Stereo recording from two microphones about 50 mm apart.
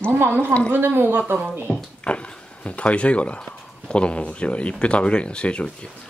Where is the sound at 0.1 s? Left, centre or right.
Right.